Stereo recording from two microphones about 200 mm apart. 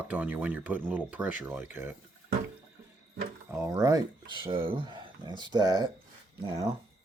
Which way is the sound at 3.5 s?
15° right (ahead or behind).